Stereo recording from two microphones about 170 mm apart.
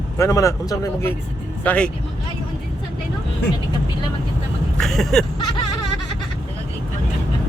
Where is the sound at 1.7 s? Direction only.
5° left (ahead or behind).